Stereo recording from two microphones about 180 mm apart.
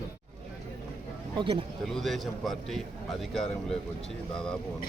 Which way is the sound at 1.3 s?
30° right (ahead or behind).